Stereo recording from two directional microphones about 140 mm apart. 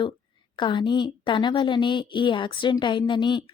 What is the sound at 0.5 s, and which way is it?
A woman's voice, 35° left (ahead or behind).